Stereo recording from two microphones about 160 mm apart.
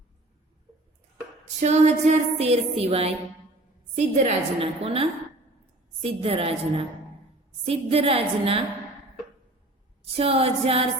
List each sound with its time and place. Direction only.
1.5 s a woman's voice: 45° right (ahead or behind)
10.2 s a woman's voice: 35° right (ahead or behind)